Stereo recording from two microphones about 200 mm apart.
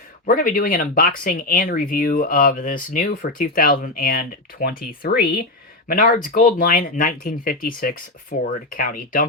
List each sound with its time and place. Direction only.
0.3 s speech: 45° left (ahead or behind)